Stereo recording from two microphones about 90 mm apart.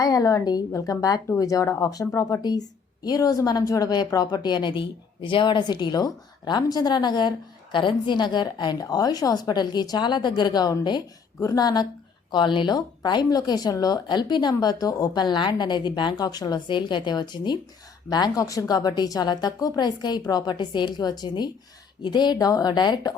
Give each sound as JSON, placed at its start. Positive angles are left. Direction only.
{"t": 0.0, "sound": "a woman's voice", "side_deg": 45}
{"t": 12.3, "sound": "a woman's voice", "side_deg": 60}